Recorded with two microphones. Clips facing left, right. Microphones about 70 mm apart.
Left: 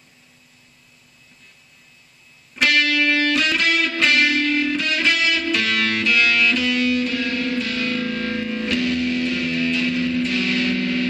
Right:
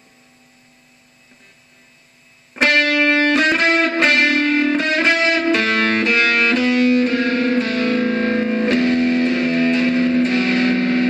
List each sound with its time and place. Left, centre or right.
2.5 s music: right